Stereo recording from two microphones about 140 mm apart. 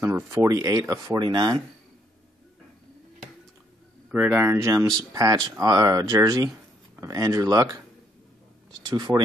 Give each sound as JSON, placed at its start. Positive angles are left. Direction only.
{"t": 0.0, "sound": "speech", "side_deg": -20}
{"t": 4.1, "sound": "speech", "side_deg": -10}
{"t": 8.8, "sound": "speech", "side_deg": -25}